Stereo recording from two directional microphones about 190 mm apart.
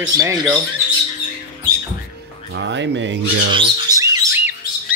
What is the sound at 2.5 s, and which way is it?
Speech, 65° right (ahead or behind).